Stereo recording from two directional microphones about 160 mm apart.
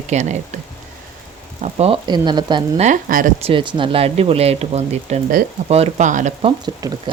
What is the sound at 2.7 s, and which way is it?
Speech, 50° right (ahead or behind).